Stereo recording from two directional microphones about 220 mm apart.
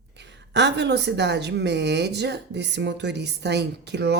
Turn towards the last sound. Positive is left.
turn(degrees=-50)  # may be behind; listen again after turning